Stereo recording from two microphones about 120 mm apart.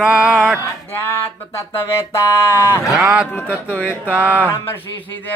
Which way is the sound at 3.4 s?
15° left (ahead or behind).